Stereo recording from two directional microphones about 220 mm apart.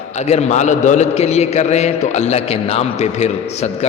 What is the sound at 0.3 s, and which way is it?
A man's voice, 30° left (ahead or behind).